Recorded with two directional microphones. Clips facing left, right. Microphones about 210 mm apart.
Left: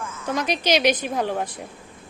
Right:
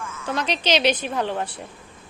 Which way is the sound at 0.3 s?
10° left (ahead or behind).